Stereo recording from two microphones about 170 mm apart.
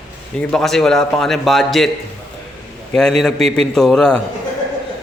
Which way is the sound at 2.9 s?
5° left (ahead or behind).